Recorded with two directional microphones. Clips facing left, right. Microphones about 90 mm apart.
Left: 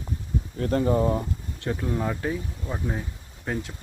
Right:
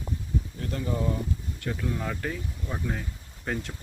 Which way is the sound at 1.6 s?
25° left (ahead or behind).